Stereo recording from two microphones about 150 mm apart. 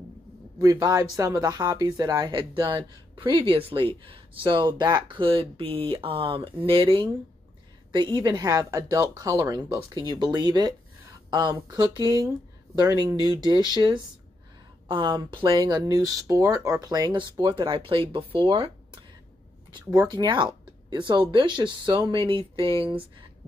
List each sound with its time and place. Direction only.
0.6 s speech: 25° right (ahead or behind)
19.7 s speech: 30° right (ahead or behind)